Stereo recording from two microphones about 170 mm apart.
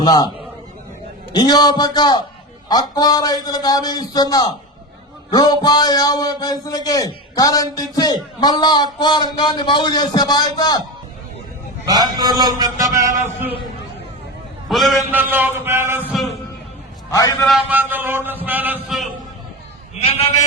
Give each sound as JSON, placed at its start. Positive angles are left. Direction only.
{"t": 0.0, "sound": "a man's voice", "side_deg": 25}
{"t": 1.3, "sound": "a man's voice", "side_deg": 25}
{"t": 11.9, "sound": "a man's voice", "side_deg": -25}
{"t": 14.7, "sound": "a man's voice", "side_deg": 0}
{"t": 15.1, "sound": "speech", "side_deg": -10}
{"t": 17.1, "sound": "a man's voice", "side_deg": 20}
{"t": 17.4, "sound": "speech", "side_deg": -5}
{"t": 20.0, "sound": "a man's voice", "side_deg": 35}